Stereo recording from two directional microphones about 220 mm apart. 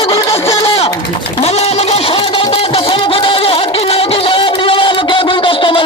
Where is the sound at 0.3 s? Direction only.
15° left (ahead or behind).